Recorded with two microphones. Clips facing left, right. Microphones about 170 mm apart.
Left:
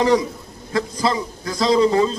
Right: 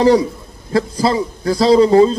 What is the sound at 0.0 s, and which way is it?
A man's voice, 35° right (ahead or behind).